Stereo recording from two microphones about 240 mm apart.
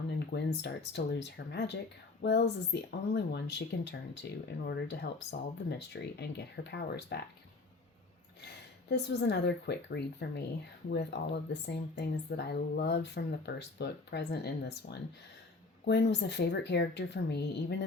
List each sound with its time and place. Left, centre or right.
0.3 s speech: left
8.9 s speech: left